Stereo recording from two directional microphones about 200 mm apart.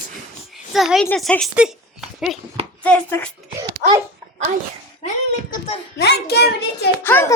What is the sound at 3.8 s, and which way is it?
Speech, 45° right (ahead or behind).